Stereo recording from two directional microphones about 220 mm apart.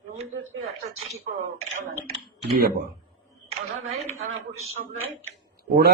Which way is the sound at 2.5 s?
45° right (ahead or behind).